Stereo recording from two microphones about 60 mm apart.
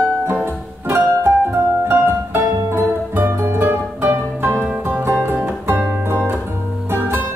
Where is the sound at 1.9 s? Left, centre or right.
Right.